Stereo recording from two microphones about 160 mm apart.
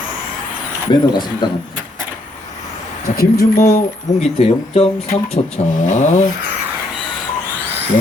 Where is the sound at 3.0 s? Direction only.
70° left (ahead or behind).